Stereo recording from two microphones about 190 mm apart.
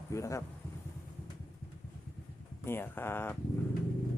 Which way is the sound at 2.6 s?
10° left (ahead or behind).